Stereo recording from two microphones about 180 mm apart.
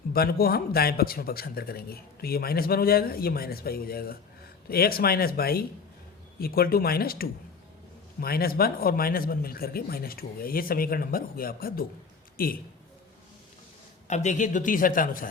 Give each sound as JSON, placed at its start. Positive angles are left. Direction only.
{"t": 0.1, "sound": "a man's voice", "side_deg": 55}
{"t": 14.1, "sound": "a man's voice", "side_deg": 40}